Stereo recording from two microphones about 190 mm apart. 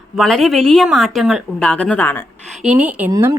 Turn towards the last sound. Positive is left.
turn(degrees=-15)  # may be behind; listen again after turning